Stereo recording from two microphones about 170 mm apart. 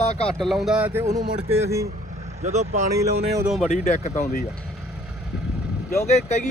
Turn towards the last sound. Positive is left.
turn(degrees=40)  # may be behind; listen again after turning